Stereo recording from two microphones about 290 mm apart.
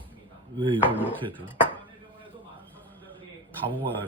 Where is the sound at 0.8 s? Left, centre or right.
Centre.